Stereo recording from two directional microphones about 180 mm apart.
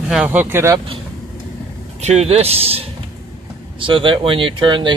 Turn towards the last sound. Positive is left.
turn(degrees=-25)  # may be behind; listen again after turning